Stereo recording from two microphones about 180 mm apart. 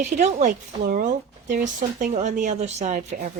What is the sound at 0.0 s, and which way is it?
Speech, 40° right (ahead or behind).